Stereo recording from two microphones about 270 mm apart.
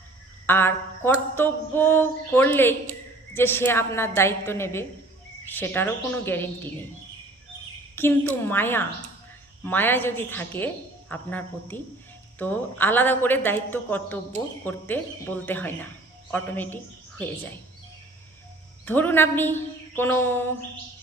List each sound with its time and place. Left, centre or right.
0.4 s a woman's voice: centre
7.9 s a woman's voice: centre
18.9 s a woman's voice: centre